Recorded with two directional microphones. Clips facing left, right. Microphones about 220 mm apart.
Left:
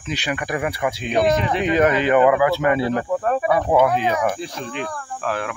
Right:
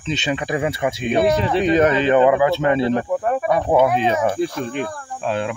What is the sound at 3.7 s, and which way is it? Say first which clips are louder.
Speech: right 2 dB; 15° right (ahead or behind).